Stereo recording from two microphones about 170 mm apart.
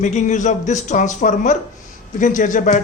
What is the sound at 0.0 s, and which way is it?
Speech, 45° left (ahead or behind).